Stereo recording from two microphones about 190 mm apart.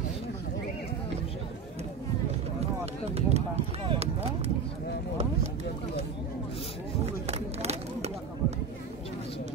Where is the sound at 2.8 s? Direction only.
35° right (ahead or behind).